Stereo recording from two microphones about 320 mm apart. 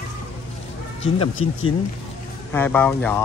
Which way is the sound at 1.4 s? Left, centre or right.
Left.